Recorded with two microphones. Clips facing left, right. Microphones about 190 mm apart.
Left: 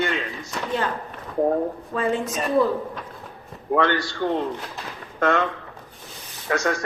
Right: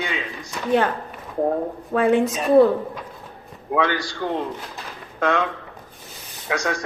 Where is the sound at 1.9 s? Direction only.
65° right (ahead or behind).